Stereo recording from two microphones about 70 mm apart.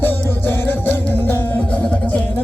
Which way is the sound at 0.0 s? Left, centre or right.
Left.